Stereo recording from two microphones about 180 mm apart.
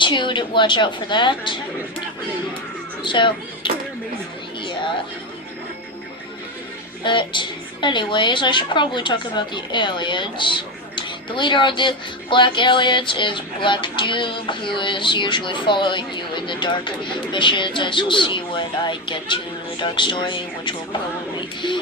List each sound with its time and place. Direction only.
0.0 s a woman's voice: 25° left (ahead or behind)
3.0 s speech: 25° left (ahead or behind)
7.0 s a woman's voice: 25° left (ahead or behind)